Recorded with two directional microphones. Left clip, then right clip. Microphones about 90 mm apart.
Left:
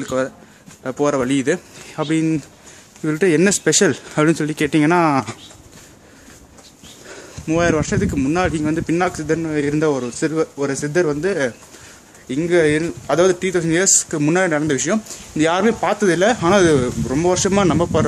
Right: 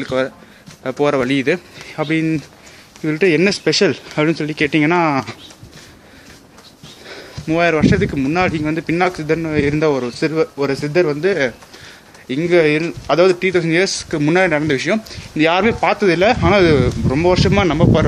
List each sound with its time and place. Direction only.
0.0 s speech: 25° left (ahead or behind)
1.9 s speech: 45° left (ahead or behind)
3.6 s speech: 65° left (ahead or behind); by 4.6 s 80° left
4.6 s speech: 50° left (ahead or behind); by 5.4 s 75° left (ahead or behind)
7.1 s speech: 20° left (ahead or behind)
8.1 s a man's voice: 40° left (ahead or behind); by 9.5 s 20° left (ahead or behind)
9.5 s speech: 10° left (ahead or behind)
9.8 s speech: 20° left (ahead or behind)
11.0 s a man's voice: 35° left (ahead or behind)
11.2 s a man's voice: 25° left (ahead or behind); by 13.4 s 45° left (ahead or behind)
13.4 s a man's voice: 25° left (ahead or behind)
14.8 s a man's voice: 30° left (ahead or behind)
16.3 s speech: 50° left (ahead or behind)
16.7 s a man's voice: 30° left (ahead or behind)